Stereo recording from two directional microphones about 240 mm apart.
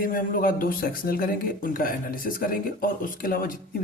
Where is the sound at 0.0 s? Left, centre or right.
Left.